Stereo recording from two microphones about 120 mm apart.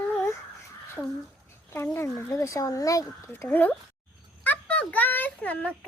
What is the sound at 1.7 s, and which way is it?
Speech, 20° left (ahead or behind).